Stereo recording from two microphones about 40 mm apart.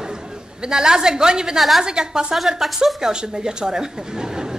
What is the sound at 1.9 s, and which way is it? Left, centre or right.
Speech, centre.